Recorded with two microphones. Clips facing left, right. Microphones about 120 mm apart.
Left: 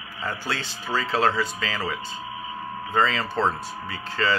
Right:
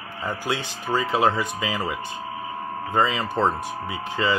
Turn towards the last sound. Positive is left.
turn(degrees=-15)  # may be behind; listen again after turning